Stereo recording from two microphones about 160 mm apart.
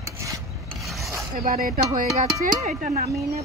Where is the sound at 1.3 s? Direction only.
55° right (ahead or behind).